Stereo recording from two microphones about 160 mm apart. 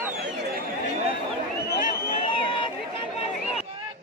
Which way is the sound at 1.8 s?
45° left (ahead or behind).